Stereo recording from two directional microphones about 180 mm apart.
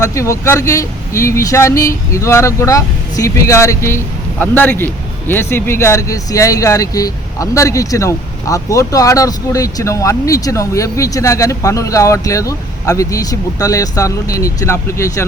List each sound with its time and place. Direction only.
0.0 s speech: 15° left (ahead or behind)